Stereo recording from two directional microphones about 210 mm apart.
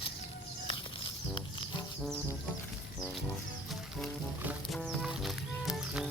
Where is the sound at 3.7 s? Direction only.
Centre (ahead or behind).